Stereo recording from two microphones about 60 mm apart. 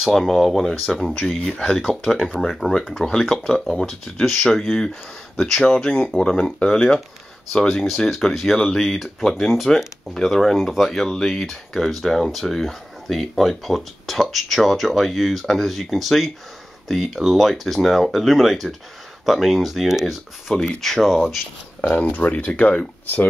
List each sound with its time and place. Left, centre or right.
0.0 s speech: centre
7.6 s speech: centre
20.5 s speech: centre
21.9 s speech: left